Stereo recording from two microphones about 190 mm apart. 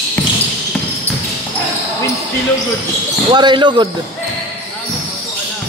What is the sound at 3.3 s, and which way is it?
Speech, 25° right (ahead or behind).